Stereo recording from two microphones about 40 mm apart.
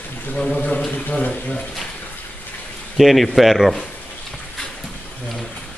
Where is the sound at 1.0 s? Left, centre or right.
Left.